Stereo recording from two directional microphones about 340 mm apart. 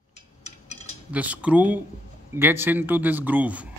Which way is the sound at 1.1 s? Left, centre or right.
Centre.